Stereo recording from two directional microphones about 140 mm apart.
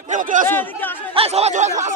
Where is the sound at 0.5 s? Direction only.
15° left (ahead or behind).